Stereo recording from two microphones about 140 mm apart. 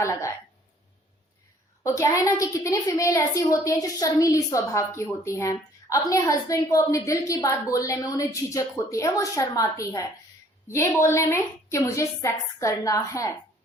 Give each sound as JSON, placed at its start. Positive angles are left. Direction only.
{"t": 0.0, "sound": "a woman's voice", "side_deg": 20}
{"t": 1.8, "sound": "a woman's voice", "side_deg": 25}